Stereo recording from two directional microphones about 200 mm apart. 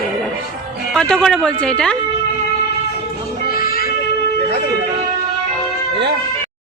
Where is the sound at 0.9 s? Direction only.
5° left (ahead or behind).